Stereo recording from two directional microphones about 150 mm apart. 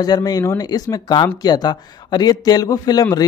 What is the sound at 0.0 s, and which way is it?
Speech, 25° left (ahead or behind).